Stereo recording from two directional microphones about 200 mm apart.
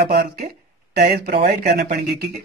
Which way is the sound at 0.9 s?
55° right (ahead or behind).